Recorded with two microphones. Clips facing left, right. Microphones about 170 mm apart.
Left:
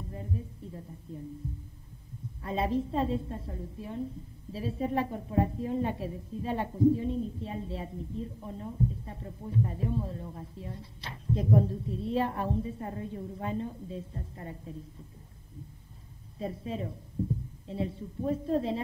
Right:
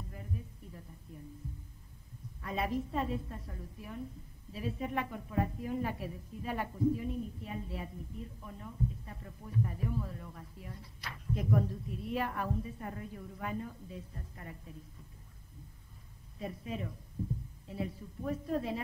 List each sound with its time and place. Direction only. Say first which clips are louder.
0.1 s a sound: left 6 dB; 30° left (ahead or behind)
2.4 s speech: left 5 dB; 30° left (ahead or behind)
16.3 s speech: left 5 dB; 30° left (ahead or behind)